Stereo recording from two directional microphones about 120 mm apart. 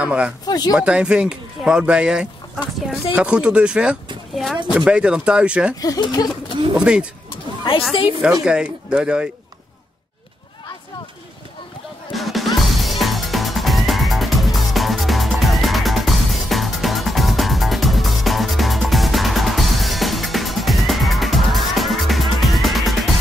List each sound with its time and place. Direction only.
0.0 s speech: 10° right (ahead or behind)
0.5 s speech: 35° left (ahead or behind)
0.7 s speech: 10° right (ahead or behind)
5.8 s speech: 35° left (ahead or behind)
6.8 s speech: 10° right (ahead or behind)
8.2 s speech: 5° right (ahead or behind)
12.1 s music: centre (ahead or behind)